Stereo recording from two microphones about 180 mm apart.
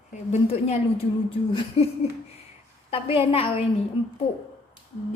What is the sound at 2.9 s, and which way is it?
Speech, 30° left (ahead or behind).